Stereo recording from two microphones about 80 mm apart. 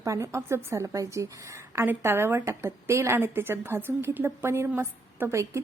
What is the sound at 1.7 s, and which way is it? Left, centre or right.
A woman's voice, right.